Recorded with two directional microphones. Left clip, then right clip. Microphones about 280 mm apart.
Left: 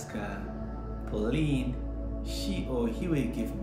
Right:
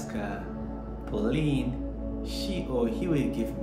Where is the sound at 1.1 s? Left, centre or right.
Centre.